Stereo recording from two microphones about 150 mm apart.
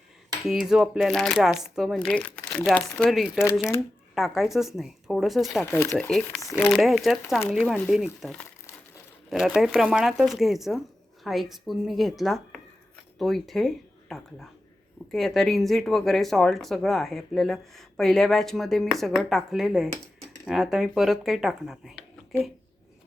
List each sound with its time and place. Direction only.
0.4 s speech: 5° right (ahead or behind); by 3.8 s 20° left (ahead or behind)
4.1 s speech: centre (ahead or behind)
5.7 s speech: 15° left (ahead or behind)
6.1 s speech: 5° left (ahead or behind)